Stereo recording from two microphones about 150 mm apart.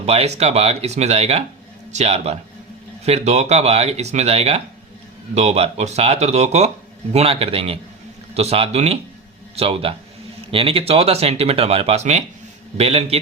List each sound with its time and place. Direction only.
0.0 s a man's voice: 45° right (ahead or behind)